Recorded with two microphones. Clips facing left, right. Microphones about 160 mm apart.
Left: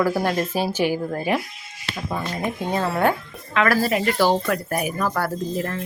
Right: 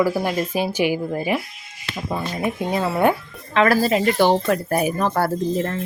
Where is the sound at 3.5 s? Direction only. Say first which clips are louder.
Right 3 dB; 25° right (ahead or behind).